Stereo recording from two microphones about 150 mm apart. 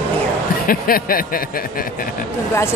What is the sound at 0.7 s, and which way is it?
Speech, 75° left (ahead or behind).